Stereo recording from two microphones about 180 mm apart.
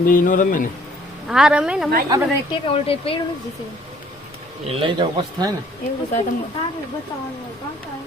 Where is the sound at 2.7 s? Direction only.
30° left (ahead or behind).